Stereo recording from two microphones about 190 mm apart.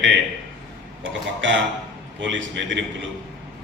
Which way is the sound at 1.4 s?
75° right (ahead or behind).